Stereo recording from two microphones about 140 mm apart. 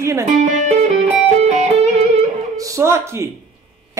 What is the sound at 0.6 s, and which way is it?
Music, 55° right (ahead or behind).